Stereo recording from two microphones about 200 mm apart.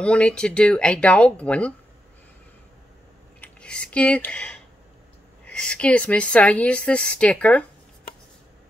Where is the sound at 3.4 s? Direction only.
5° left (ahead or behind).